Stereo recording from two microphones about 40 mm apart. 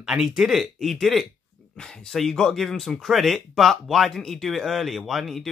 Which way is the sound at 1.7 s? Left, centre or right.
Centre.